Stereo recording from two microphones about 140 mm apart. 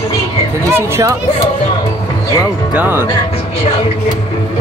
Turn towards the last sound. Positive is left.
turn(degrees=-15)  # may be behind; listen again after turning